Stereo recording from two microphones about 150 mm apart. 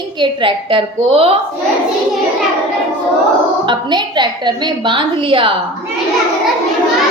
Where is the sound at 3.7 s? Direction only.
30° right (ahead or behind).